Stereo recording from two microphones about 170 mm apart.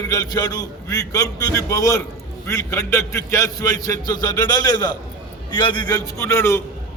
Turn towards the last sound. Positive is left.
turn(degrees=15)  # may be behind; listen again after turning